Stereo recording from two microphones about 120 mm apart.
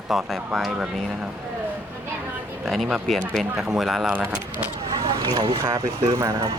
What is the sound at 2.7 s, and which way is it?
Speech, centre (ahead or behind).